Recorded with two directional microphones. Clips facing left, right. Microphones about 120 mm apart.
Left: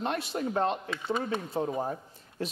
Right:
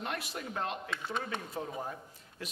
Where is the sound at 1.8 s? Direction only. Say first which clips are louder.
Left 7 dB; 30° left (ahead or behind).